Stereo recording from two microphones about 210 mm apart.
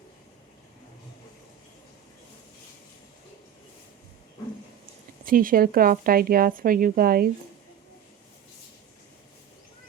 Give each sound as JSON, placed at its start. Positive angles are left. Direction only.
{"t": 5.2, "sound": "speech", "side_deg": -40}